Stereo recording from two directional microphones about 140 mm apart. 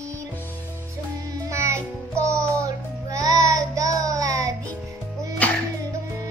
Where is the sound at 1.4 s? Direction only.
20° right (ahead or behind).